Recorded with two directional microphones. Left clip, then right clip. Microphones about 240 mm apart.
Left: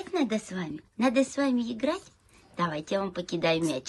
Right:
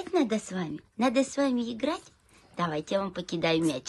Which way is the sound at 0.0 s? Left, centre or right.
Centre.